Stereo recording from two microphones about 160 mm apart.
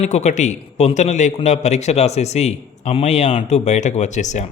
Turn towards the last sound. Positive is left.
turn(degrees=45)  # may be behind; listen again after turning